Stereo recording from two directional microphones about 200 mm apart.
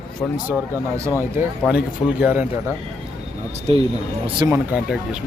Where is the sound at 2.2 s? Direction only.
10° right (ahead or behind).